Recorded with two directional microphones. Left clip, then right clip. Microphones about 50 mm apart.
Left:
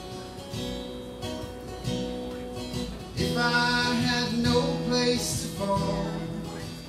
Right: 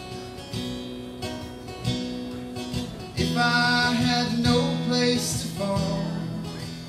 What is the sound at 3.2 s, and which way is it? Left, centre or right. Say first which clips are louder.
Music: right 2 dB; centre.